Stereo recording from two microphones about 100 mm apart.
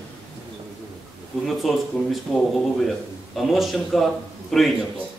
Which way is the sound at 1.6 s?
Centre (ahead or behind).